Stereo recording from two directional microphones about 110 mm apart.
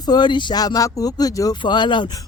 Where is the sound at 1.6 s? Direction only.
45° left (ahead or behind).